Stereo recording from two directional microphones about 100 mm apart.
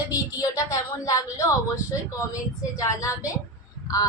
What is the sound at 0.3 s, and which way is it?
A woman's voice, 35° left (ahead or behind).